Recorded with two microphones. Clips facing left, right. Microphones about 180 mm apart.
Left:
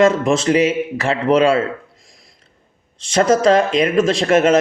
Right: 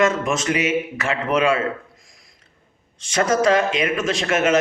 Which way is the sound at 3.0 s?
30° left (ahead or behind).